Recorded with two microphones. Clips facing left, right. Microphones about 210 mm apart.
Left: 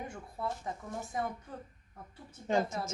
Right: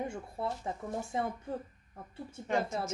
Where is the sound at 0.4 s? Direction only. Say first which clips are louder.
Right 1 dB; 25° right (ahead or behind).